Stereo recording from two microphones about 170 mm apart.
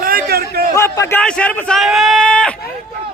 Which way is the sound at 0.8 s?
15° left (ahead or behind).